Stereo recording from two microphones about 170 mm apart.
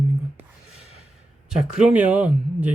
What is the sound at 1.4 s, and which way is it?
Speech, 5° right (ahead or behind).